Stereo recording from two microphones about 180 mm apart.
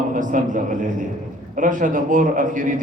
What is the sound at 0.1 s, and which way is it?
A man's voice, 45° right (ahead or behind).